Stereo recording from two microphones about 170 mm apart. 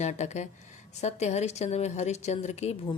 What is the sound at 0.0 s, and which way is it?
A woman's voice, 40° left (ahead or behind).